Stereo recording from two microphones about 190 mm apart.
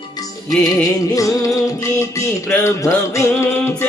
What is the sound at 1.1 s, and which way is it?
Music, 15° left (ahead or behind).